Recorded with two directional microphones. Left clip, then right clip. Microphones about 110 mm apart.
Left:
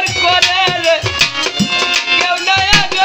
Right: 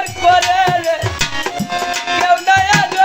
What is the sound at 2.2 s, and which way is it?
Music, 25° right (ahead or behind).